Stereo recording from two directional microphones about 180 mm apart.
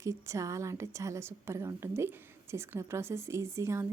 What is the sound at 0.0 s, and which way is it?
A woman's voice, 15° right (ahead or behind).